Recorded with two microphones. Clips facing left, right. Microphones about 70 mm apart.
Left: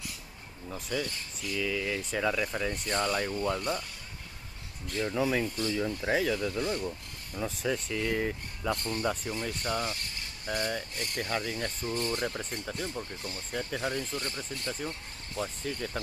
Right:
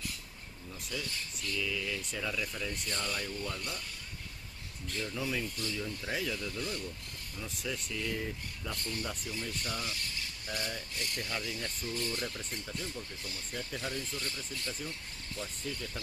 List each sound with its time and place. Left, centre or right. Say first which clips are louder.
0.7 s speech: left 7 dB; left
5.0 s speech: left 8 dB; left
6.3 s speech: left 7 dB; left
7.9 s speech: left 6 dB; left